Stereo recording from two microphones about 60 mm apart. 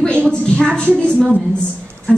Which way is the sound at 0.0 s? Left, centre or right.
Centre.